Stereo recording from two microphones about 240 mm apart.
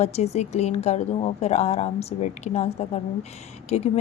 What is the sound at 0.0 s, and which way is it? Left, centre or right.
Speech, left.